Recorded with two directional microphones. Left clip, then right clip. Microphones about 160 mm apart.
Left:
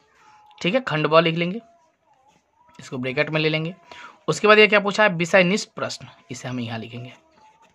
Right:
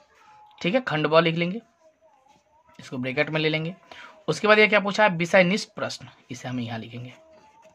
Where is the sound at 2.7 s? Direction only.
20° left (ahead or behind).